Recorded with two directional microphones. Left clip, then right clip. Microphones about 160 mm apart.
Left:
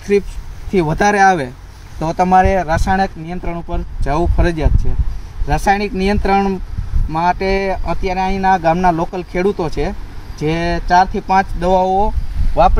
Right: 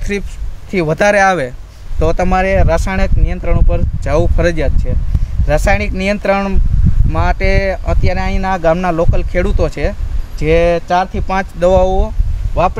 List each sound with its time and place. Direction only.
0.7 s speech: 25° right (ahead or behind)